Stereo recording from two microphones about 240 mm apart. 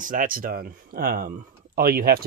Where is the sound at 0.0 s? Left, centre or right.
Right.